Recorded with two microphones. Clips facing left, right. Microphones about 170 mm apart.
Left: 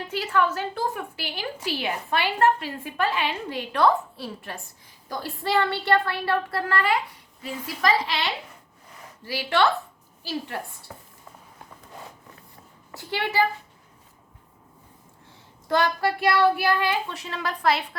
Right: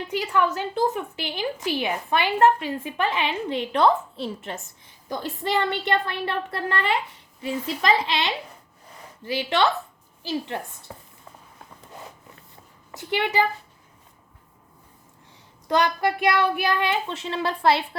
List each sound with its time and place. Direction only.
0.1 s a woman's voice: 15° right (ahead or behind)
12.9 s a woman's voice: 20° right (ahead or behind)
15.6 s a woman's voice: 20° right (ahead or behind)